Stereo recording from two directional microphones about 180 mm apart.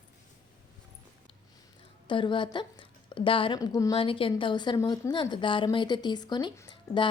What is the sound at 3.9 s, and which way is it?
A woman's voice, 30° left (ahead or behind).